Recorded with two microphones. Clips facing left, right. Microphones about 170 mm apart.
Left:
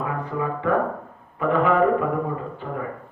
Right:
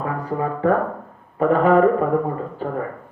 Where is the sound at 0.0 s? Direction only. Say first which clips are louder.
Right 3 dB; 40° right (ahead or behind).